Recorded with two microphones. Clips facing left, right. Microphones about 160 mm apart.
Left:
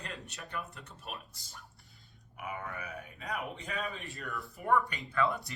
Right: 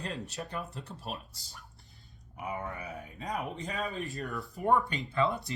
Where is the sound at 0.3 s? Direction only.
35° right (ahead or behind).